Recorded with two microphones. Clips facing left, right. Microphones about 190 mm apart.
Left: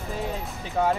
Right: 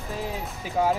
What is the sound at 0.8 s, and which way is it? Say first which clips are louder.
Speech: even; 5° right (ahead or behind).